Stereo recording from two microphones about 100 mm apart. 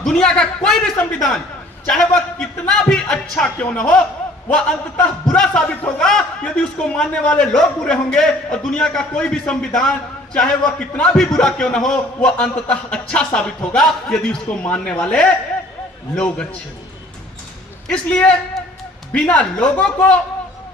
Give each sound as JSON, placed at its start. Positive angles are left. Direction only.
{"t": 0.0, "sound": "a man's voice", "side_deg": 5}
{"t": 17.8, "sound": "a man's voice", "side_deg": 15}